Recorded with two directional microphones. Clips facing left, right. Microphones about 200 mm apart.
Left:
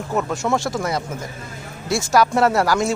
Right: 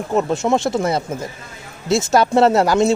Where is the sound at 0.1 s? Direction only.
25° right (ahead or behind).